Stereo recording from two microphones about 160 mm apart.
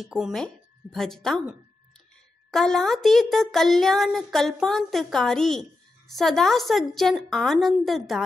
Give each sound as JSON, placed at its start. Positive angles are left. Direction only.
{"t": 0.0, "sound": "speech", "side_deg": 0}